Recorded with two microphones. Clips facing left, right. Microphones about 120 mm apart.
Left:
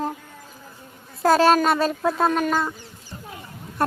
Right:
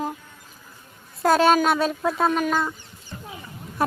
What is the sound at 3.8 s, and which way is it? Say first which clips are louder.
Speech: left 1 dB; centre (ahead or behind).